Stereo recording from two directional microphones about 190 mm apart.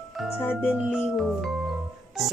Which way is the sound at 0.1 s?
Centre (ahead or behind).